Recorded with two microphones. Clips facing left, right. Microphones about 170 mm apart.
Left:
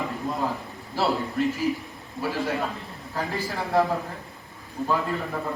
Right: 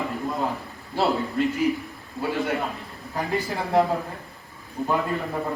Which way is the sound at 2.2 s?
20° left (ahead or behind).